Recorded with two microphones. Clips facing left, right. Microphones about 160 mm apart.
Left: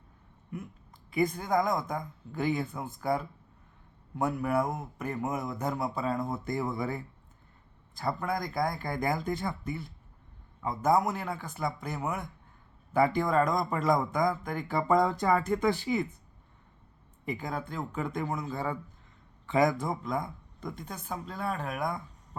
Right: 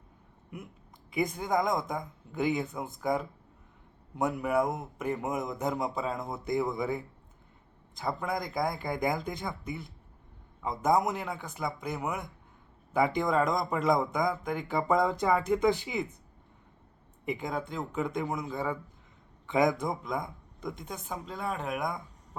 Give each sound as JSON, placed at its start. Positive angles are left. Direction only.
{"t": 1.1, "sound": "speech", "side_deg": -15}
{"t": 17.2, "sound": "speech", "side_deg": -20}